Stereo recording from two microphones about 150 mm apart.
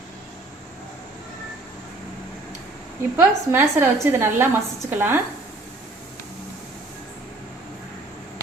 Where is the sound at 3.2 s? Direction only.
15° right (ahead or behind).